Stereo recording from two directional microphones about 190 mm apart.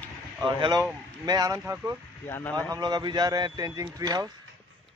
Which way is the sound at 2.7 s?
20° right (ahead or behind).